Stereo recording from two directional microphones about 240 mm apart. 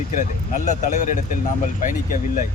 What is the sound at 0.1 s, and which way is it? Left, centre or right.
Speech, left.